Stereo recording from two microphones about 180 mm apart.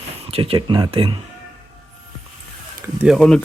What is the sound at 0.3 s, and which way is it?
Speech, 30° right (ahead or behind).